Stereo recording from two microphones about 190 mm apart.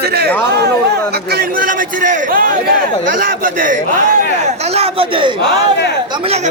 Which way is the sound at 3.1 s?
45° right (ahead or behind).